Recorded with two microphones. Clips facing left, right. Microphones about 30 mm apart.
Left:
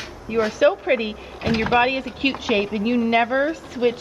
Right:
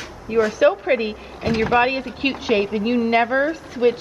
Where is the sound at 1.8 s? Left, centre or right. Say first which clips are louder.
Even; centre.